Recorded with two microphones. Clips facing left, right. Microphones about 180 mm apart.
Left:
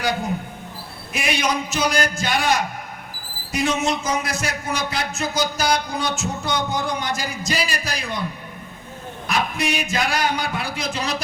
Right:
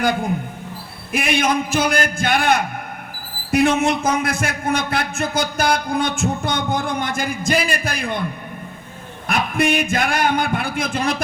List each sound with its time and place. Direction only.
1.1 s a man's voice: 55° right (ahead or behind)
9.2 s speech: 55° right (ahead or behind)